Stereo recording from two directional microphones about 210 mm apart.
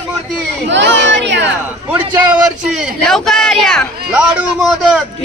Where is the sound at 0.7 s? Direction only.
55° right (ahead or behind).